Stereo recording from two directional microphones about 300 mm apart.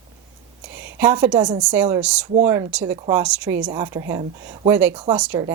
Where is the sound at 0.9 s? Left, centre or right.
Centre.